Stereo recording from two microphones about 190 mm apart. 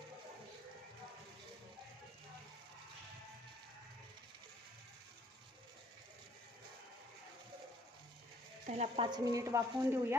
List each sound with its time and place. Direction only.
8.6 s speech: 35° right (ahead or behind)
9.0 s speech: 20° right (ahead or behind)